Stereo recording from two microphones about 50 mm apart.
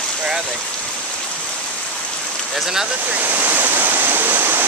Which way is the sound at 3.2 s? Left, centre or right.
Right.